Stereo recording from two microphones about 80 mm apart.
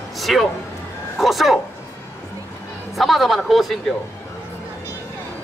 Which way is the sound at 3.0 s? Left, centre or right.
Centre.